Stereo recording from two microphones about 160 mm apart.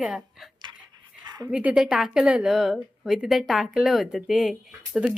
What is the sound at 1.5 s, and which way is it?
A woman's voice, 10° right (ahead or behind).